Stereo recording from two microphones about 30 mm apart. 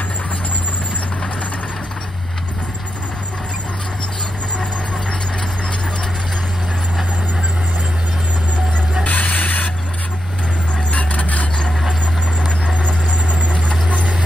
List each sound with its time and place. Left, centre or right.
9.0 s mechanisms: left
10.9 s vehicle: left
13.8 s vehicle: right